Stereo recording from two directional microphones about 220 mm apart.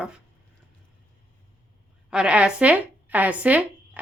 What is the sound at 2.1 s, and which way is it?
Speech, 5° right (ahead or behind).